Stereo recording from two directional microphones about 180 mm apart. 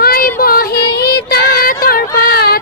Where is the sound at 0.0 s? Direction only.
55° left (ahead or behind).